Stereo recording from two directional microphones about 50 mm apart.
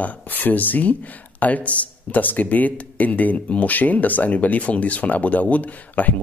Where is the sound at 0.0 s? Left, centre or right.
Left.